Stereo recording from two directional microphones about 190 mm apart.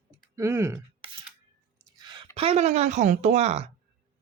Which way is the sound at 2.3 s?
30° right (ahead or behind).